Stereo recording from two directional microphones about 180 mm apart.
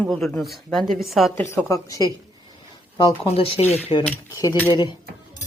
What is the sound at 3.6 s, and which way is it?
A woman's voice, 10° left (ahead or behind).